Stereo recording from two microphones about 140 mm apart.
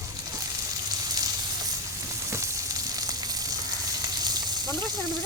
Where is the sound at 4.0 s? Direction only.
30° right (ahead or behind).